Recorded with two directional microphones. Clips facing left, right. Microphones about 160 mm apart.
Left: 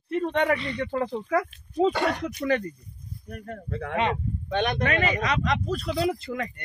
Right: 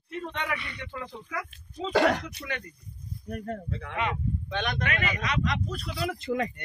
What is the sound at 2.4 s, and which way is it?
Speech, 50° left (ahead or behind).